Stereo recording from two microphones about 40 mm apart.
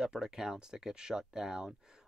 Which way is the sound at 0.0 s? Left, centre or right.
Centre.